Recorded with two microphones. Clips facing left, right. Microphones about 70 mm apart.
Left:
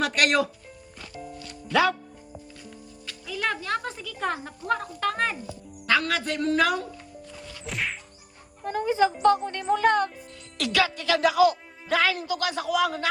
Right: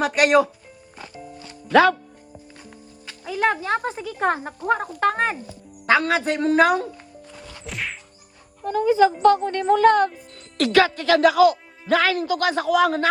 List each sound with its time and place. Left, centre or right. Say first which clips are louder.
0.0 s speech: right 6 dB; centre
1.7 s a man's voice: right 7 dB; right
3.2 s speech: right 7 dB; right
7.6 s whack: even; centre
9.2 s speech: right 5 dB; right
10.6 s a man's voice: right 7 dB; right